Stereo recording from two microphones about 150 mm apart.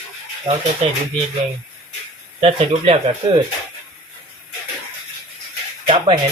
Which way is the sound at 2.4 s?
40° right (ahead or behind).